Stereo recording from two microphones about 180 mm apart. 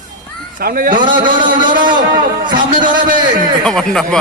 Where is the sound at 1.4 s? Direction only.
25° right (ahead or behind).